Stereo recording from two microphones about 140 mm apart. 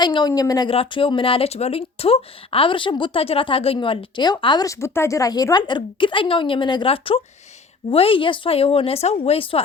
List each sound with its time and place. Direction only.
0.0 s speech: 30° left (ahead or behind)
0.7 s speech: 40° left (ahead or behind)
4.6 s speech: 20° left (ahead or behind); by 9.6 s 40° left (ahead or behind)